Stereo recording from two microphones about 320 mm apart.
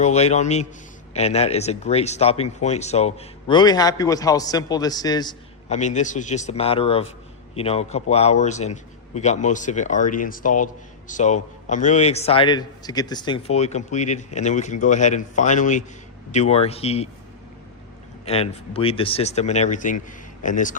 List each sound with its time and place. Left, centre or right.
0.0 s speech: left
18.3 s speech: centre